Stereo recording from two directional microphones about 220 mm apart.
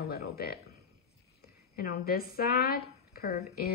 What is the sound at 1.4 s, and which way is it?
A woman's voice, 45° left (ahead or behind).